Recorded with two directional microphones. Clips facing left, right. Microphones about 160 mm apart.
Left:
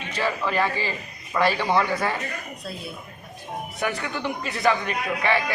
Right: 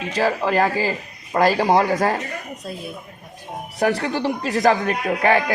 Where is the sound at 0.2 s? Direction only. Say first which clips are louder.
Right 5 dB; 40° right (ahead or behind).